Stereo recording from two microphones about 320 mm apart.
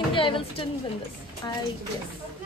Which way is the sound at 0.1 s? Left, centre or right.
Centre.